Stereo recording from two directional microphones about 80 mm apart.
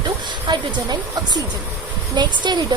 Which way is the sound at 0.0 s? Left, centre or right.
Right.